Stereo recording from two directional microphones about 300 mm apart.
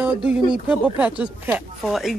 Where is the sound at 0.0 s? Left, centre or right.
Centre.